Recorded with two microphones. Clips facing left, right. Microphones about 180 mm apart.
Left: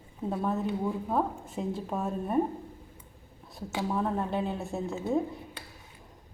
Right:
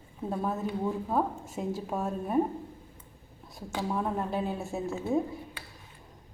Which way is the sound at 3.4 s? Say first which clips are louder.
Left 1 dB; centre (ahead or behind).